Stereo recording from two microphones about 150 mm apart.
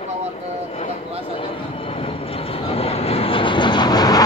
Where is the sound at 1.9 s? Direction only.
40° left (ahead or behind).